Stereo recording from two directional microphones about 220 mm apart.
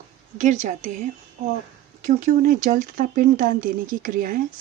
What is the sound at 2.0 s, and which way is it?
Speech, 35° right (ahead or behind).